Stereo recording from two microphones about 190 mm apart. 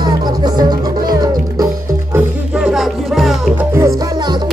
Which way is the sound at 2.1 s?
5° right (ahead or behind).